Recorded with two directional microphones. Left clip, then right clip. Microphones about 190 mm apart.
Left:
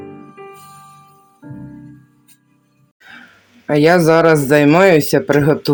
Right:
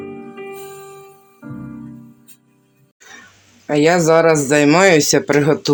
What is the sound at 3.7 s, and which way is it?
Speech, 35° left (ahead or behind).